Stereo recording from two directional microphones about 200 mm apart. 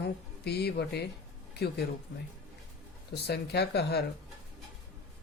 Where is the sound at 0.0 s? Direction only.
55° left (ahead or behind).